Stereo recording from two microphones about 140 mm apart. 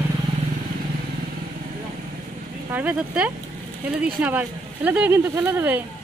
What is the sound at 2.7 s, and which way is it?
Speech, 10° right (ahead or behind).